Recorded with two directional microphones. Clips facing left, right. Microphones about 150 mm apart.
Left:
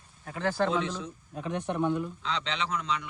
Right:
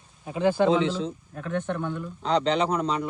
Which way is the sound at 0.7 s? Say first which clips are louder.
Right 7 dB; 85° right.